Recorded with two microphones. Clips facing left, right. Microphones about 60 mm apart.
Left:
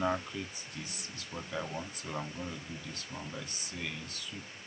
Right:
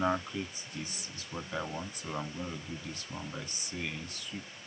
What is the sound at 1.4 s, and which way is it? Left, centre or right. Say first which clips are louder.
Speech: right 1 dB; centre.